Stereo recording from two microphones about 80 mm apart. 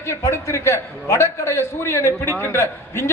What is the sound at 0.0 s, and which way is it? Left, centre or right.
A man's voice, left.